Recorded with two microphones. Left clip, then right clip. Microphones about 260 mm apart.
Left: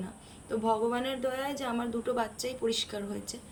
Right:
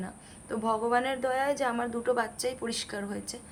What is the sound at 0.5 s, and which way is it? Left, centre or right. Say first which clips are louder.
A woman's voice: right 2 dB; centre.